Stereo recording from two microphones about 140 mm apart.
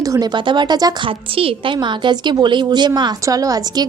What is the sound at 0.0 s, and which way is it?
A woman's voice, 25° right (ahead or behind).